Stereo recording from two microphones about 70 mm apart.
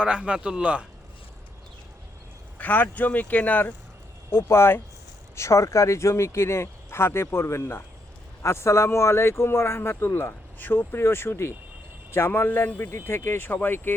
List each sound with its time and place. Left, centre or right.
0.0 s speech: centre
2.6 s speech: left
4.3 s speech: left
12.9 s speech: left